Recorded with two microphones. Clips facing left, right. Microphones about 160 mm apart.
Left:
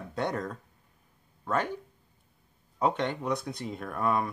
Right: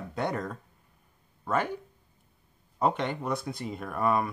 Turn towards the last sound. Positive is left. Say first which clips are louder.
# right 2 dB
turn(degrees=-5)  # may be behind; listen again after turning